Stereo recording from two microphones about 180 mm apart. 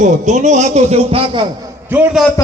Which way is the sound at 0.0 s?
40° right (ahead or behind).